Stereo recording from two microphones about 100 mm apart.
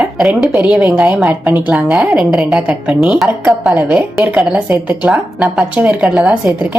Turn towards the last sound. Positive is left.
turn(degrees=-10)  # may be behind; listen again after turning